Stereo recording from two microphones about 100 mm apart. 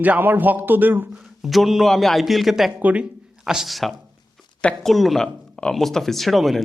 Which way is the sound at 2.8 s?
15° right (ahead or behind).